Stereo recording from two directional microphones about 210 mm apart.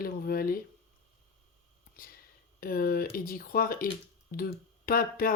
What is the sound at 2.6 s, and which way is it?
Speech, 45° left (ahead or behind).